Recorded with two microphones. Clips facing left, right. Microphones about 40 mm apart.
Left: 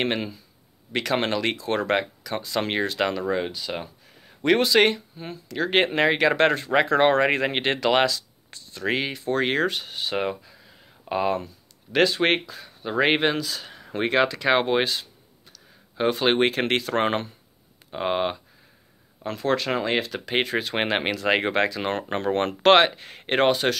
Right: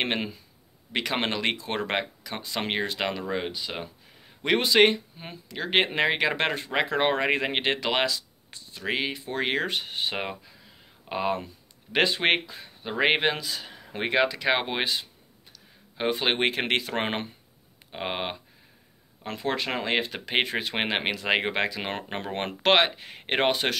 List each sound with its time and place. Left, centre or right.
0.0 s speech: centre
8.8 s speech: centre
9.7 s speech: right
10.1 s speech: centre
11.9 s speech: right
13.0 s speech: centre
14.8 s speech: centre
19.4 s speech: centre
20.7 s speech: centre
23.5 s speech: right